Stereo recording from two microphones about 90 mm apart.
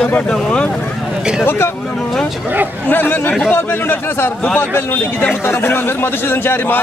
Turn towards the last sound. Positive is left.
turn(degrees=25)  # may be behind; listen again after turning